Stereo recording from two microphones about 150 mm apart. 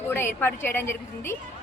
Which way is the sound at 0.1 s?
15° left (ahead or behind).